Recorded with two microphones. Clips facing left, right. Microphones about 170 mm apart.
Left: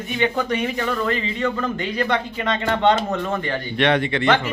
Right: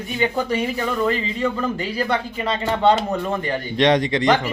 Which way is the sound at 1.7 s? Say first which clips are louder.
Even; 35° right (ahead or behind).